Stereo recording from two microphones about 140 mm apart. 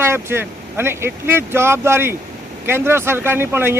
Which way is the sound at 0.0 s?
20° right (ahead or behind).